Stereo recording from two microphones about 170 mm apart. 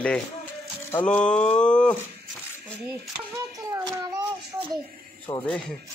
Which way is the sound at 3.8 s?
20° right (ahead or behind).